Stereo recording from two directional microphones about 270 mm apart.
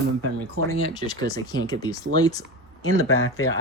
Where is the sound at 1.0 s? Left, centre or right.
Centre.